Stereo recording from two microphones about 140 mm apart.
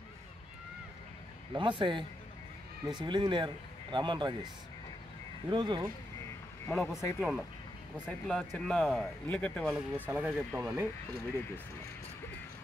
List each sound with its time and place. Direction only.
1.5 s speech: 35° right (ahead or behind)
5.5 s speech: 35° right (ahead or behind)
6.7 s speech: centre (ahead or behind)
9.8 s speech: 10° right (ahead or behind)